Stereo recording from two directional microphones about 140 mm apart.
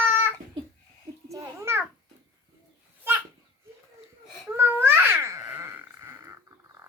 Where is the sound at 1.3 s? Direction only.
20° right (ahead or behind).